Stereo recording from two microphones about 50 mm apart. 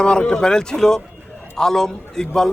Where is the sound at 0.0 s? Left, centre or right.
Centre.